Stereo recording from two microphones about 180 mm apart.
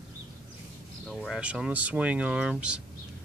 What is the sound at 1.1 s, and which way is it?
Speech, centre (ahead or behind).